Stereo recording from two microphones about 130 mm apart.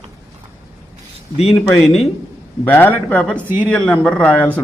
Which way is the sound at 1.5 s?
Centre (ahead or behind).